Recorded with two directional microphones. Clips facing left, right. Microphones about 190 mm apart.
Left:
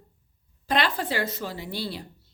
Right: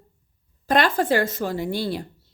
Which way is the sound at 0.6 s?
45° right (ahead or behind).